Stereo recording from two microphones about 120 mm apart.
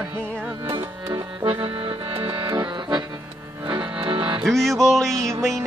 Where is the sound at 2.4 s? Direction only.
40° right (ahead or behind).